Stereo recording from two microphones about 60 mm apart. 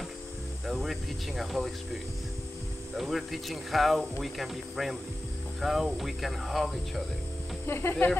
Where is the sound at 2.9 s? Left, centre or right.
Centre.